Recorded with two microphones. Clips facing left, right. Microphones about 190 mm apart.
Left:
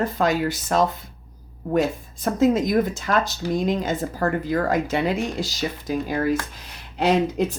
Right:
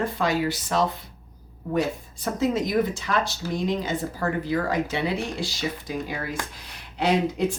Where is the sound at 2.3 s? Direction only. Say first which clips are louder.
Left 4 dB; 50° left (ahead or behind).